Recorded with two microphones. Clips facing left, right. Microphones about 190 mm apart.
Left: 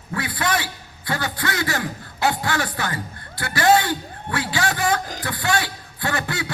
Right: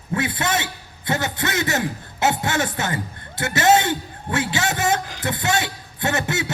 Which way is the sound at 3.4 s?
20° right (ahead or behind).